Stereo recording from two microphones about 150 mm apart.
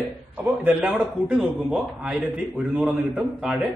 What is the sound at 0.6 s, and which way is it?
A man's voice, 10° right (ahead or behind).